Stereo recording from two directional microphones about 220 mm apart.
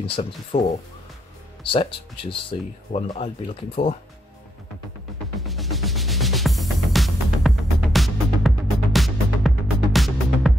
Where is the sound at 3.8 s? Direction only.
45° left (ahead or behind).